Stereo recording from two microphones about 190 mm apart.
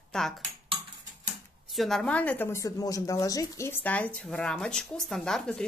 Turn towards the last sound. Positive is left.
turn(degrees=5)  # may be behind; listen again after turning